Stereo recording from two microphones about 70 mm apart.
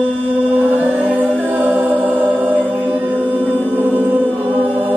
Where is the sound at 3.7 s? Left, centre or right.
Right.